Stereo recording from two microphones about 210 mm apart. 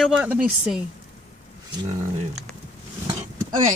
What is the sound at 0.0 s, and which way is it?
Speech, 5° right (ahead or behind).